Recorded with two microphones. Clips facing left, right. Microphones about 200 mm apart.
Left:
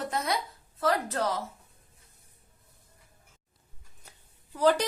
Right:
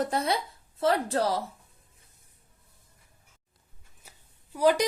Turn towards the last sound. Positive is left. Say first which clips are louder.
# right 1 dB
turn(degrees=-10)  # may be behind; listen again after turning